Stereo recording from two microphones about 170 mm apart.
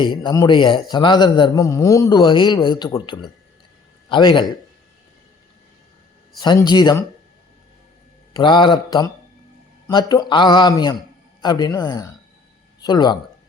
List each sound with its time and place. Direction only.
0.0 s a man's voice: 25° left (ahead or behind)
6.4 s a man's voice: 25° left (ahead or behind)
8.3 s a man's voice: 25° left (ahead or behind)